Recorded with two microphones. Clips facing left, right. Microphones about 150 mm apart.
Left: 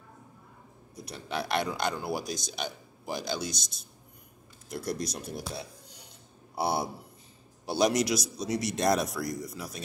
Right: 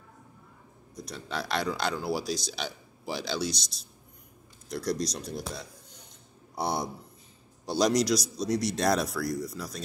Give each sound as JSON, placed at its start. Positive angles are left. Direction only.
{"t": 0.9, "sound": "speech", "side_deg": 5}
{"t": 2.0, "sound": "speech", "side_deg": 50}
{"t": 4.8, "sound": "speech", "side_deg": 55}
{"t": 5.3, "sound": "speech", "side_deg": 5}